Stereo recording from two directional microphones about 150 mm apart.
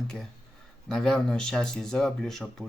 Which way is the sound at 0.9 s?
5° left (ahead or behind).